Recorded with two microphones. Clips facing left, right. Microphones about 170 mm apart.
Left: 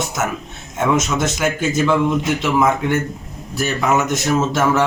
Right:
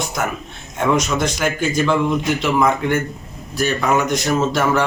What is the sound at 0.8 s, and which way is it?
Speech, 5° left (ahead or behind).